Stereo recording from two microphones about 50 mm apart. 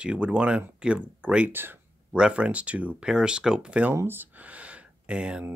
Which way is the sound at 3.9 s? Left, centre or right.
Right.